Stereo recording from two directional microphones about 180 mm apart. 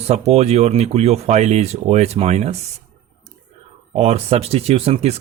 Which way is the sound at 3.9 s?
35° right (ahead or behind).